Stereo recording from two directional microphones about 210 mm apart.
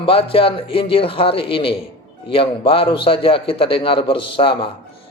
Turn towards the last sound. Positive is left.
turn(degrees=25)  # may be behind; listen again after turning